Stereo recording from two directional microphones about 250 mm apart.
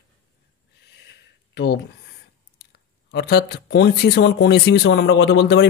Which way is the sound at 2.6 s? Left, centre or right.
Left.